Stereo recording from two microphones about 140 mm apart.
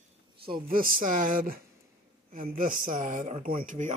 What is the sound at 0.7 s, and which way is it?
Speech, 90° right.